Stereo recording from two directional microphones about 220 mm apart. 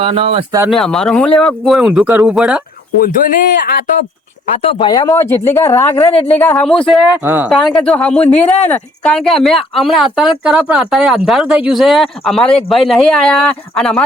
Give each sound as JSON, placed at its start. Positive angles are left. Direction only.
{"t": 0.0, "sound": "speech", "side_deg": -25}
{"t": 0.7, "sound": "speech", "side_deg": 0}
{"t": 3.0, "sound": "speech", "side_deg": 40}
{"t": 4.5, "sound": "speech", "side_deg": 25}
{"t": 7.3, "sound": "speech", "side_deg": -5}
{"t": 8.2, "sound": "speech", "side_deg": 30}
{"t": 8.6, "sound": "speech", "side_deg": 5}